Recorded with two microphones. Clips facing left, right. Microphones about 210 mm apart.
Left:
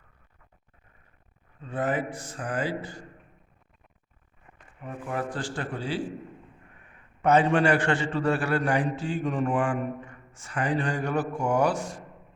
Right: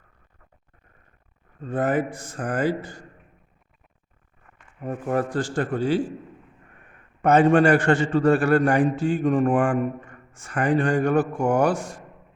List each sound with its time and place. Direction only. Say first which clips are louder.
1.6 s a man's voice: right 5 dB; 45° right (ahead or behind)
4.8 s a man's voice: right 7 dB; 40° right (ahead or behind)
7.2 s a man's voice: right 5 dB; 50° right (ahead or behind)